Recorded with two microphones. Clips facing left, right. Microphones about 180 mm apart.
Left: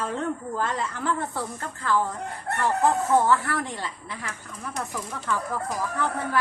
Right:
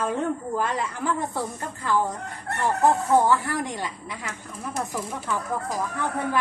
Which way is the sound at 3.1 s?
15° right (ahead or behind).